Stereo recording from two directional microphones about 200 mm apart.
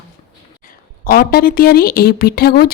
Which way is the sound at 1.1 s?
50° left (ahead or behind).